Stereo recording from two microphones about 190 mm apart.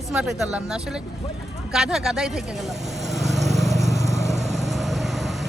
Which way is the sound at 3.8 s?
35° right (ahead or behind).